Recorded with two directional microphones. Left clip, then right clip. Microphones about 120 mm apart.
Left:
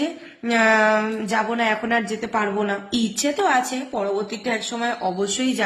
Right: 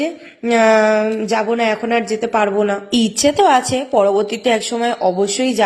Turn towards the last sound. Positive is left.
turn(degrees=-40)  # may be behind; listen again after turning